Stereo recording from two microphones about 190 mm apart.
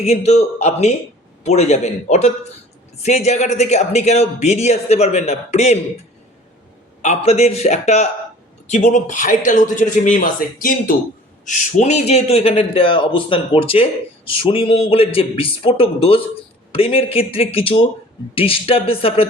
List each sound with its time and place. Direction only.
0.0 s a man's voice: 35° left (ahead or behind)
7.0 s a man's voice: 35° left (ahead or behind)